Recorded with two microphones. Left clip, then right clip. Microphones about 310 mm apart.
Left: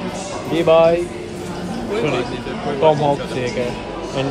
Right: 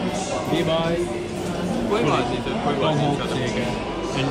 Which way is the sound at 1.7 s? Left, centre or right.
Centre.